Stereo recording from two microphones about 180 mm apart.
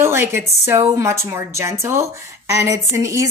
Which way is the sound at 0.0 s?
15° right (ahead or behind).